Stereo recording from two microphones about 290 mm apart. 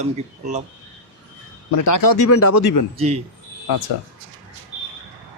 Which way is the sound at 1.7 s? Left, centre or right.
Left.